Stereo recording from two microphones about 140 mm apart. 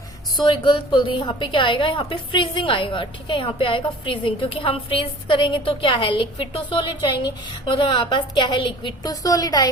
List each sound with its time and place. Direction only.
0.4 s a woman's voice: 35° left (ahead or behind)